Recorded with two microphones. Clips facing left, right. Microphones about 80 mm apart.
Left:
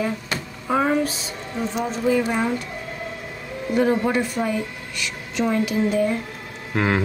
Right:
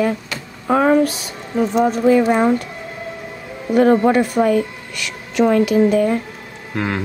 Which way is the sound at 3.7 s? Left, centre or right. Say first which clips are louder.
Right 7 dB; right.